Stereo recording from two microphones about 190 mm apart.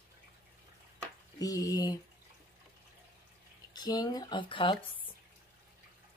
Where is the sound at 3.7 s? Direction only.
20° left (ahead or behind).